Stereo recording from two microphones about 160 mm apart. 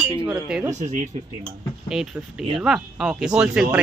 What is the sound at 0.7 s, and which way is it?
Speech, 50° right (ahead or behind).